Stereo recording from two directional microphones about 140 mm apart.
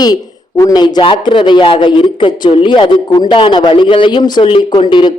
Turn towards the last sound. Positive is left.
turn(degrees=35)  # may be behind; listen again after turning